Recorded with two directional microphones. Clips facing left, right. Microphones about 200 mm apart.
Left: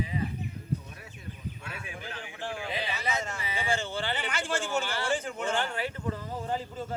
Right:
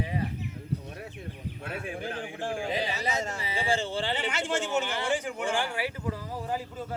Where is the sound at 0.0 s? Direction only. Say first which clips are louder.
Right 1 dB; 65° right (ahead or behind).